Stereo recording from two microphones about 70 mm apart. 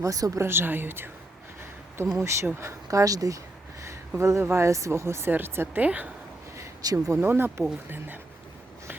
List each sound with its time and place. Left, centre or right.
0.0 s speech: right
0.4 s speech: right
2.1 s speech: right
2.6 s a sound: right
4.2 s speech: right
5.3 s speech: right
6.8 s speech: right
7.2 s speech: right